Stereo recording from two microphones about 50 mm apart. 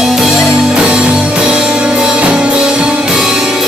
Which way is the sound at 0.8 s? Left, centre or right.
Centre.